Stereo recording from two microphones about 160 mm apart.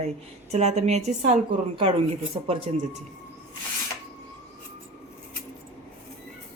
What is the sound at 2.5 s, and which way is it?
Speech, 40° right (ahead or behind).